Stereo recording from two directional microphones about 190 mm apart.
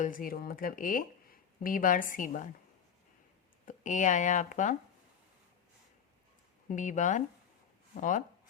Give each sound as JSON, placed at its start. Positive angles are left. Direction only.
{"t": 0.0, "sound": "a woman's voice", "side_deg": 45}
{"t": 3.7, "sound": "speech", "side_deg": 40}
{"t": 6.7, "sound": "speech", "side_deg": 40}